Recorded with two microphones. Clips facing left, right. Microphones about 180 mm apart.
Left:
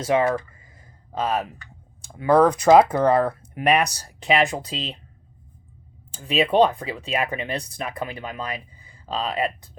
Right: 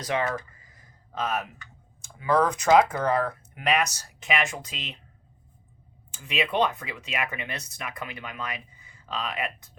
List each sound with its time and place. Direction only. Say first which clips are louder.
0.0 s a sound: left 7 dB; 25° left (ahead or behind)
2.0 s speech: left 7 dB; 35° left (ahead or behind)
6.1 s speech: left 7 dB; 35° left (ahead or behind)